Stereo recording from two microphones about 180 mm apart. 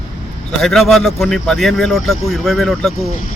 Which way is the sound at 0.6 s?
Centre (ahead or behind).